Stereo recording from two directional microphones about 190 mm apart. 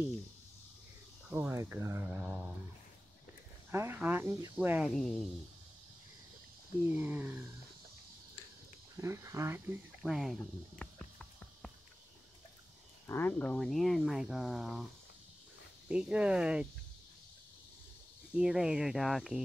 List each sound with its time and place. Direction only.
1.3 s speech: 10° right (ahead or behind)
3.7 s speech: 10° right (ahead or behind)
6.9 s speech: 10° right (ahead or behind)
8.9 s speech: 15° right (ahead or behind)
10.0 s speech: centre (ahead or behind)
10.8 s music: 5° left (ahead or behind)
13.0 s speech: 10° left (ahead or behind)
15.9 s speech: 5° right (ahead or behind)
18.3 s speech: 5° right (ahead or behind)